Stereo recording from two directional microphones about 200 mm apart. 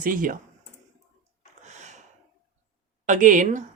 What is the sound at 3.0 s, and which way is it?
Speech, 40° right (ahead or behind).